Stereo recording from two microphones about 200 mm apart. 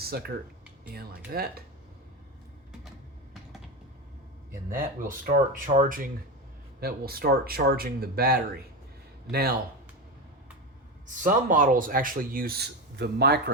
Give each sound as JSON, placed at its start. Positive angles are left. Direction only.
{"t": 0.0, "sound": "a man's voice", "side_deg": -50}
{"t": 4.7, "sound": "a man's voice", "side_deg": -40}
{"t": 11.1, "sound": "a man's voice", "side_deg": -40}